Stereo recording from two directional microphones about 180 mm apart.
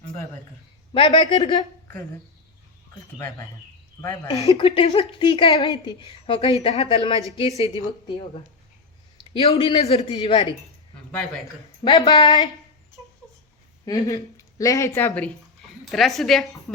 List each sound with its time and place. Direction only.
0.9 s a woman's voice: 25° left (ahead or behind)
4.5 s a woman's voice: 30° left (ahead or behind)
9.3 s a woman's voice: 30° left (ahead or behind)
11.9 s a woman's voice: 30° left (ahead or behind)
13.8 s a woman's voice: 20° left (ahead or behind); by 16.7 s centre (ahead or behind)